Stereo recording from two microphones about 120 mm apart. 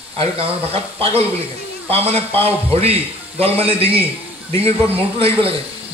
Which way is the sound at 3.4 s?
55° right (ahead or behind).